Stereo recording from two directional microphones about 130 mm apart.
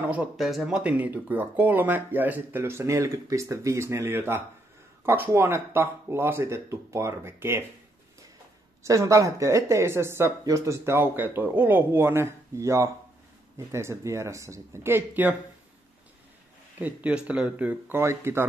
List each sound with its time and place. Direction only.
0.0 s a sound: 10° right (ahead or behind)
0.4 s speech: centre (ahead or behind); by 7.6 s 20° right (ahead or behind)
8.8 s speech: 25° right (ahead or behind)
16.7 s speech: 10° right (ahead or behind)